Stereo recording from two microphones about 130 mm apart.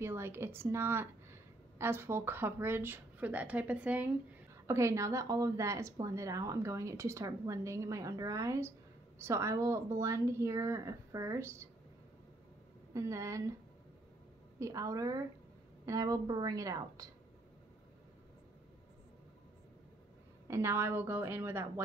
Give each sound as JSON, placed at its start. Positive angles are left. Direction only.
{"t": 0.0, "sound": "a woman's voice", "side_deg": -20}
{"t": 4.6, "sound": "a woman's voice", "side_deg": -20}
{"t": 12.9, "sound": "a woman's voice", "side_deg": -25}
{"t": 14.6, "sound": "a woman's voice", "side_deg": -25}
{"t": 20.4, "sound": "speech", "side_deg": -20}